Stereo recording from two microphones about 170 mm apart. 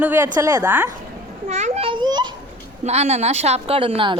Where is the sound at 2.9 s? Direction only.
40° right (ahead or behind).